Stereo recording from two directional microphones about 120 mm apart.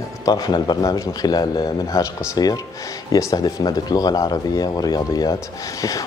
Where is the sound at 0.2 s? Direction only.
35° left (ahead or behind).